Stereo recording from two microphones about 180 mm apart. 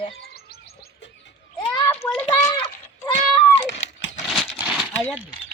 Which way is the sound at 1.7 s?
15° left (ahead or behind).